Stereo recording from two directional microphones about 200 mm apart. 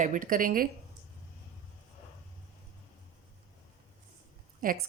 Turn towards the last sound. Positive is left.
turn(degrees=-45)  # may be behind; listen again after turning